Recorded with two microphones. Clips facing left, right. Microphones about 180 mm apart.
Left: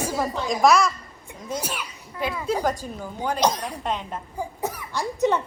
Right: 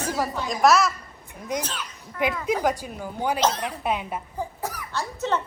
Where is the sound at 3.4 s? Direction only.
15° left (ahead or behind).